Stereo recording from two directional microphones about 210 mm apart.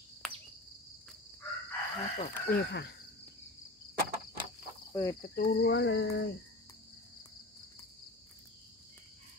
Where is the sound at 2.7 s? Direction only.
55° left (ahead or behind).